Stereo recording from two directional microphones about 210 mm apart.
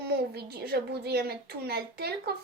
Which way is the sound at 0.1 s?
50° right (ahead or behind).